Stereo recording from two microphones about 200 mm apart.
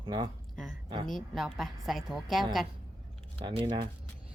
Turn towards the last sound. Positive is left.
turn(degrees=-25)  # may be behind; listen again after turning